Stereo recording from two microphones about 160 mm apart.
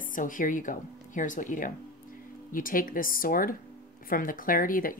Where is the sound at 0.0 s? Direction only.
55° left (ahead or behind).